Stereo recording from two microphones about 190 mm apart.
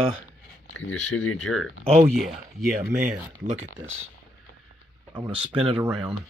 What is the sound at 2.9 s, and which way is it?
Speech, 5° right (ahead or behind).